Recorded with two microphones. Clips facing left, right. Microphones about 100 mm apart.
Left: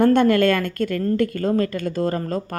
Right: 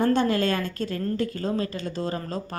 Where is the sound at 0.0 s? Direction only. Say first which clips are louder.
Left 7 dB; 60° left (ahead or behind).